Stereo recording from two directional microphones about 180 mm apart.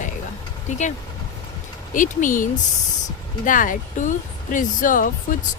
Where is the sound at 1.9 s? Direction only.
45° left (ahead or behind).